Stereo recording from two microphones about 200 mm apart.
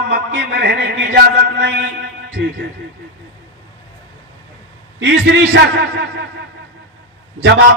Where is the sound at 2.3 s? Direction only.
55° right (ahead or behind).